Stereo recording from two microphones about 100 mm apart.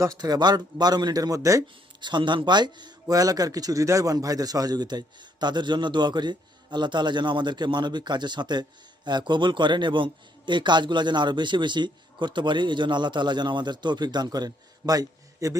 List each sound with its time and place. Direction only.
0.0 s speech: 40° right (ahead or behind)
2.0 s a man's voice: 50° right (ahead or behind)